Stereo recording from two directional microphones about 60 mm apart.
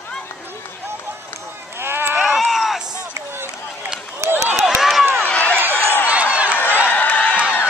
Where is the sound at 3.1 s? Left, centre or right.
Right.